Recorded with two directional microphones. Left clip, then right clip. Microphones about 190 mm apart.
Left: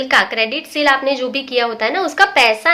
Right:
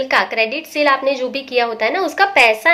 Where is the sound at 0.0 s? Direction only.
5° left (ahead or behind).